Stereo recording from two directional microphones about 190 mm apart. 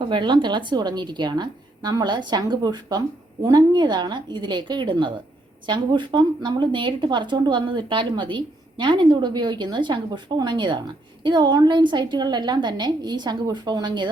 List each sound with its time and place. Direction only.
0.1 s speech: 25° right (ahead or behind)